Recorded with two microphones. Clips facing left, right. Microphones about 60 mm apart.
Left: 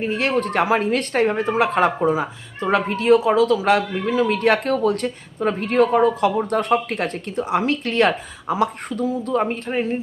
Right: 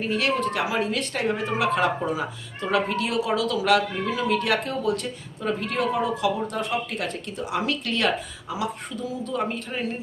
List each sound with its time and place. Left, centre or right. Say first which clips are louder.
0.0 s speech: left 3 dB; left